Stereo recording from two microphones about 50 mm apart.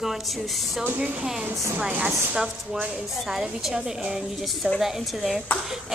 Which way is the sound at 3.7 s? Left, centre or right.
Centre.